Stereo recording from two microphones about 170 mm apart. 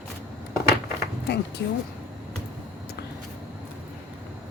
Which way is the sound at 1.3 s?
80° left.